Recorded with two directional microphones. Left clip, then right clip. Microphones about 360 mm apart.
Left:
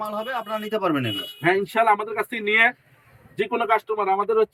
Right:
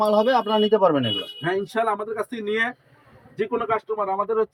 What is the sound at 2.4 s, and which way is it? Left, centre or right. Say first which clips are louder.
A man's voice: left 8 dB; centre.